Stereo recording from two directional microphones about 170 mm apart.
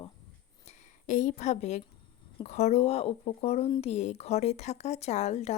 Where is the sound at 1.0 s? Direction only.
45° left (ahead or behind).